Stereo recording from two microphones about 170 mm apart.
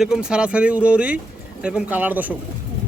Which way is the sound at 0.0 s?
5° right (ahead or behind).